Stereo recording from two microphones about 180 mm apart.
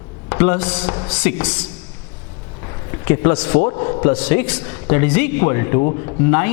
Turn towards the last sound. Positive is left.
turn(degrees=15)  # may be behind; listen again after turning